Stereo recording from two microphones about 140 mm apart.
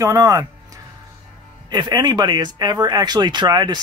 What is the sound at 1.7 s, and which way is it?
Speech, 30° right (ahead or behind).